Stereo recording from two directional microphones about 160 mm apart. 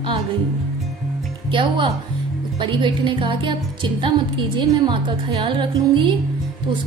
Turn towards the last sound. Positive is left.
turn(degrees=-30)  # may be behind; listen again after turning